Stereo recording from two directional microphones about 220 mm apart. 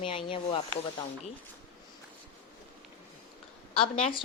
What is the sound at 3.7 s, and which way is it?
Speech, 25° left (ahead or behind).